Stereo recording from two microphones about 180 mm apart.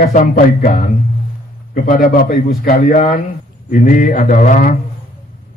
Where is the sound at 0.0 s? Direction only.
55° left (ahead or behind).